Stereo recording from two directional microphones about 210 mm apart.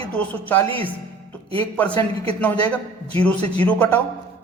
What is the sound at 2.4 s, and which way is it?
A man's voice, 5° left (ahead or behind).